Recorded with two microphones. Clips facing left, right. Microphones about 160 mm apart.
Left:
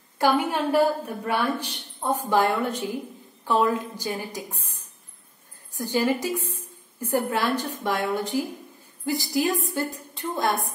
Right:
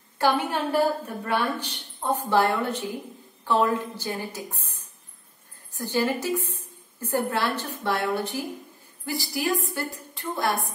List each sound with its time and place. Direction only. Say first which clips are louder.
0.2 s a woman's voice: left 2 dB; 10° left (ahead or behind)